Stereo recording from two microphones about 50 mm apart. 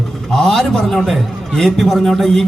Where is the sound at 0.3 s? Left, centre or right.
Centre.